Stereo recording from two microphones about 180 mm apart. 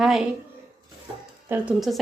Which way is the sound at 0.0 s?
Centre (ahead or behind).